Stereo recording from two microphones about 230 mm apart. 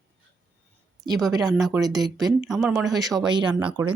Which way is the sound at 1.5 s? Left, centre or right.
Centre.